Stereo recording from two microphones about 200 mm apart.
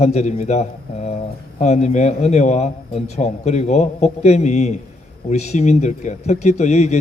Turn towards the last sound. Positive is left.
turn(degrees=35)  # may be behind; listen again after turning